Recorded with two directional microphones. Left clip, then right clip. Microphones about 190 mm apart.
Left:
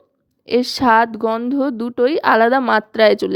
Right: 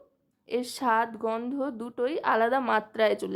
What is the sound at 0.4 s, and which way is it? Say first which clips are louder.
A woman's voice: left 12 dB; 40° left (ahead or behind).